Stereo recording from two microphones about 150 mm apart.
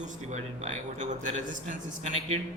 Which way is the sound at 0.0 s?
50° right (ahead or behind).